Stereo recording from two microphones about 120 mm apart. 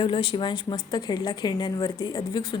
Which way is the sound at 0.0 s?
45° left (ahead or behind).